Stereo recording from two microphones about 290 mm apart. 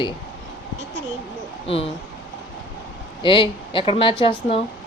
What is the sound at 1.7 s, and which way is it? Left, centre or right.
Speech, centre.